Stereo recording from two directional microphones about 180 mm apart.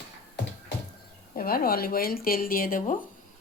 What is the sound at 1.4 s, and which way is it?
A woman's voice, 55° left (ahead or behind).